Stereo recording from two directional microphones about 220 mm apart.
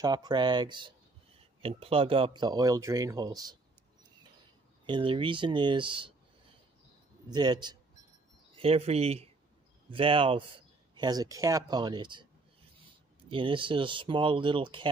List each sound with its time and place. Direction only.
0.0 s speech: 20° right (ahead or behind)
4.8 s speech: 20° right (ahead or behind)
7.2 s speech: 20° right (ahead or behind)